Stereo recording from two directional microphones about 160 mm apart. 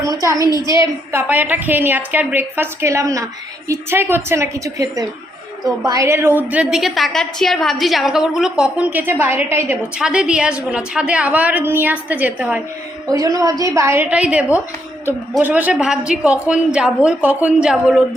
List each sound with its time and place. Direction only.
0.3 s a woman's voice: 20° right (ahead or behind)
0.5 s a woman's voice: 25° left (ahead or behind)
0.8 s a woman's voice: 15° right (ahead or behind)
13.1 s a woman's voice: 20° right (ahead or behind); by 18.0 s 5° right (ahead or behind)